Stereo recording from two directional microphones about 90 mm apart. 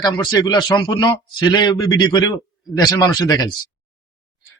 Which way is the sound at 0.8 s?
55° left (ahead or behind).